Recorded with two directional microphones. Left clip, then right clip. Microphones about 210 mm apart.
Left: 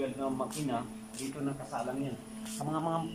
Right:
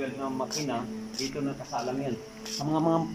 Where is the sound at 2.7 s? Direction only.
25° right (ahead or behind).